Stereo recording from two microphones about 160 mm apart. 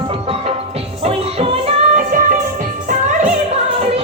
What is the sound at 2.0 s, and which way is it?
Music, 55° right (ahead or behind).